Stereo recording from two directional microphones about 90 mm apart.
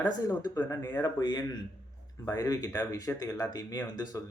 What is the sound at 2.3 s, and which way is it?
Speech, 40° left (ahead or behind).